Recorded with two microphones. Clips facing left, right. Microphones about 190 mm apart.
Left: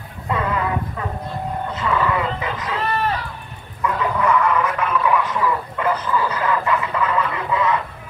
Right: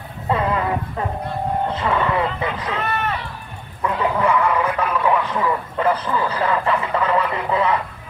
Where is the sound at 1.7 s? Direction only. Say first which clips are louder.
Right 1 dB; 30° right (ahead or behind).